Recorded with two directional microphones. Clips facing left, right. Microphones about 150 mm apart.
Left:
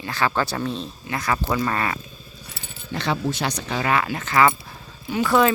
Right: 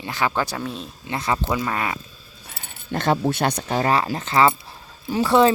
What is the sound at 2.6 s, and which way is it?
Speech, 50° right (ahead or behind).